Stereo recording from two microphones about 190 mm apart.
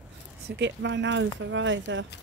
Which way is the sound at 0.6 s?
65° right (ahead or behind).